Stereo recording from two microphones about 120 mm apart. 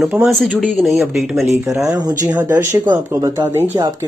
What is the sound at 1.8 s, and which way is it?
Speech, 30° right (ahead or behind).